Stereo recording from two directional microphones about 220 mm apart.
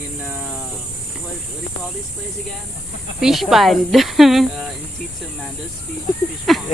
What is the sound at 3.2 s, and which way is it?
Speech, centre (ahead or behind).